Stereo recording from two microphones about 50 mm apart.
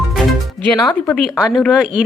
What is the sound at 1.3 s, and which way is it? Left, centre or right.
Speech, centre.